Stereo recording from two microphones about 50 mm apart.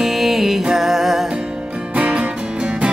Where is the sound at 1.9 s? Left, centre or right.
Right.